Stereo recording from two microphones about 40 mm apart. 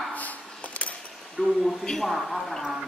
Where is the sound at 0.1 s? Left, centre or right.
Left.